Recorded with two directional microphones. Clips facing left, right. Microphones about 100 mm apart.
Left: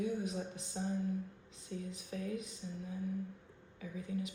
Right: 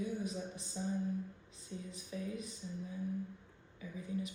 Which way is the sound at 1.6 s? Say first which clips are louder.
Left 3 dB; 85° left.